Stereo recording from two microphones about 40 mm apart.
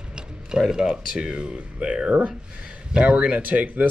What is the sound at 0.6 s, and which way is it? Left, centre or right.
Speech, centre.